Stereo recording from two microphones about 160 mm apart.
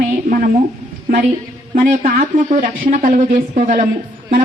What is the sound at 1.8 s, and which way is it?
A woman's voice, 60° right (ahead or behind).